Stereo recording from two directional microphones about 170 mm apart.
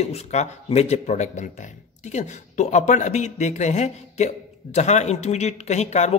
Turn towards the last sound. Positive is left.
turn(degrees=40)  # may be behind; listen again after turning